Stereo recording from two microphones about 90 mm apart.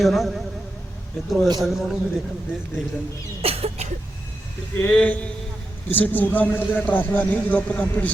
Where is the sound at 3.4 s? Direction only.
90° right.